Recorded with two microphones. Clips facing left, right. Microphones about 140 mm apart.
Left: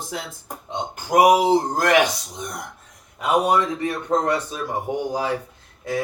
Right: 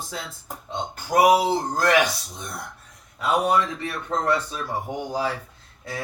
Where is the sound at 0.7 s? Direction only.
20° left (ahead or behind).